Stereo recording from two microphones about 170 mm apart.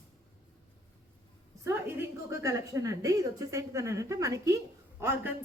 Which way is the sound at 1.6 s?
15° right (ahead or behind).